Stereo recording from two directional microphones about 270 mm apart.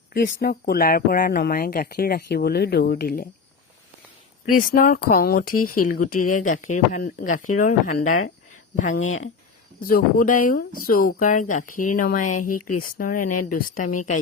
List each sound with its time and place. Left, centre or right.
0.1 s speech: left
4.5 s speech: left
9.0 s speech: left
9.8 s speech: left